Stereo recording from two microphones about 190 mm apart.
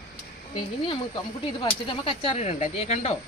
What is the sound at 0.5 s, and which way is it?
Speech, 25° left (ahead or behind).